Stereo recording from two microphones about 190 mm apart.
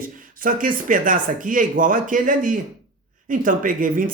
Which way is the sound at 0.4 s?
45° right (ahead or behind).